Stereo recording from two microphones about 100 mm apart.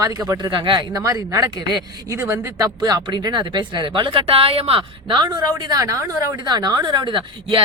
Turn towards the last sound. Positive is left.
turn(degrees=-55)  # may be behind; listen again after turning